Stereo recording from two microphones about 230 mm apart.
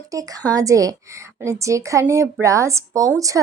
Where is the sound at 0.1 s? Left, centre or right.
Centre.